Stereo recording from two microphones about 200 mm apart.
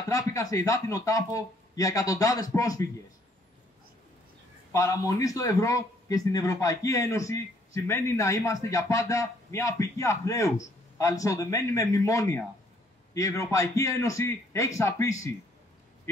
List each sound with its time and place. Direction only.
0.1 s a man's voice: 15° left (ahead or behind)
4.7 s a man's voice: 15° left (ahead or behind)